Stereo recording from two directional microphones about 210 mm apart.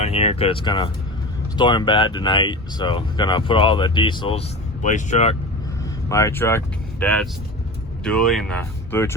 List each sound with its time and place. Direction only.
0.0 s speech: 30° left (ahead or behind)
6.1 s speech: 15° left (ahead or behind)